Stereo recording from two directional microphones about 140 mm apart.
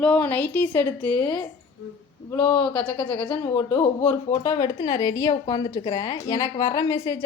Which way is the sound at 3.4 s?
25° left (ahead or behind).